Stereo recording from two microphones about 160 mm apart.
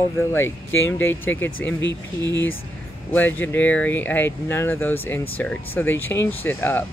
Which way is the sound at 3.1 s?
10° left (ahead or behind).